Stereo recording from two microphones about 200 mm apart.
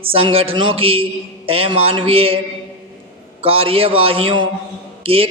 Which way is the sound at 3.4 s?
30° right (ahead or behind).